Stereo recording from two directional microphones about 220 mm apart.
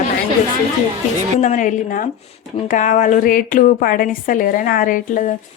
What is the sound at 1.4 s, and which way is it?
A woman's voice, 35° left (ahead or behind).